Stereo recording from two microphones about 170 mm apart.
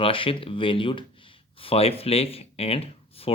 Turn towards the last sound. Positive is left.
turn(degrees=35)  # may be behind; listen again after turning